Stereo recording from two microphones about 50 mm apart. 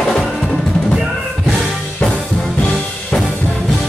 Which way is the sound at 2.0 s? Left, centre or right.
Centre.